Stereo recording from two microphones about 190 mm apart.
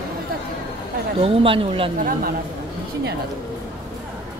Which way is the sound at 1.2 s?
30° right (ahead or behind).